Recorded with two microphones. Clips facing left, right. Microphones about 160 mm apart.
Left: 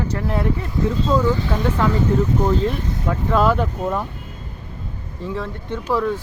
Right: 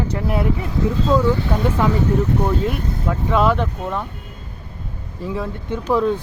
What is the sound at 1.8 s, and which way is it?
Speech, 15° right (ahead or behind).